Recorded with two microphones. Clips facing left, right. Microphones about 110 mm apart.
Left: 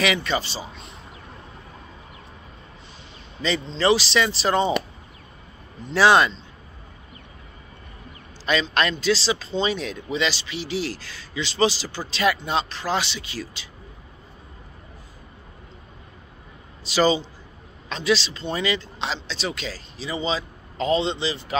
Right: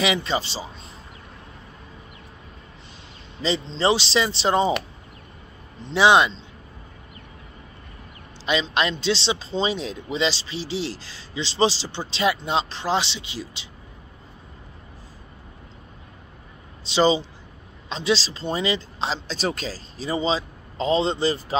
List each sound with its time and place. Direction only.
0.0 s speech: 25° right (ahead or behind)
3.4 s speech: 30° right (ahead or behind)
5.8 s a man's voice: 30° right (ahead or behind)
6.0 s a man's voice: 20° right (ahead or behind)
8.5 s speech: 20° right (ahead or behind)
16.8 s a man's voice: 25° right (ahead or behind)
19.1 s a man's voice: 40° right (ahead or behind)